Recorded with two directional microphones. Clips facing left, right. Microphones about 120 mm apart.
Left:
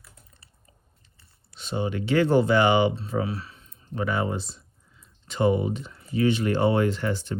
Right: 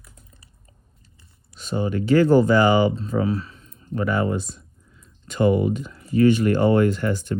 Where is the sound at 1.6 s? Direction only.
45° right (ahead or behind).